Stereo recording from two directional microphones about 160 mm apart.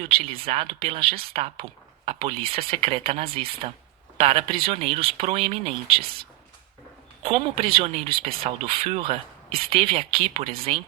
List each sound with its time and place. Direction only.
0.0 s speech: 35° right (ahead or behind)
7.2 s speech: 35° right (ahead or behind)